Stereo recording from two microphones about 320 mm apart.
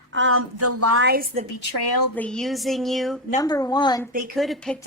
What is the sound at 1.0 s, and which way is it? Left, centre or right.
Speech, right.